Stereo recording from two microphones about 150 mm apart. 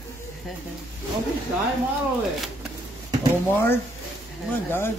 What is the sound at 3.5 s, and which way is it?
Speech, 15° left (ahead or behind).